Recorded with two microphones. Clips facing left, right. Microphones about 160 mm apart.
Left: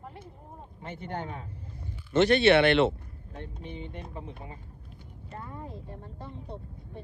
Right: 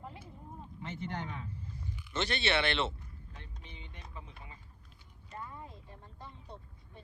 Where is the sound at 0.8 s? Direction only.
50° left (ahead or behind).